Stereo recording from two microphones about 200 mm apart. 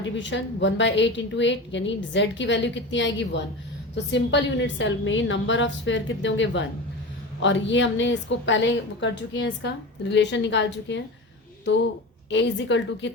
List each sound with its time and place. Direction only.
0.0 s a woman's voice: 65° left (ahead or behind)
12.3 s a woman's voice: 65° left (ahead or behind)